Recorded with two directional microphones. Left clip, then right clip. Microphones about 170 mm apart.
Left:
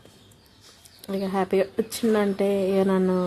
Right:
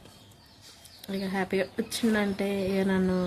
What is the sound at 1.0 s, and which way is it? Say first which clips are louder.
A woman's voice: left 6 dB; 10° left (ahead or behind).